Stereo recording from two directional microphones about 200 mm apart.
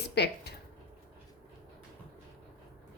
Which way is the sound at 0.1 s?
55° left (ahead or behind).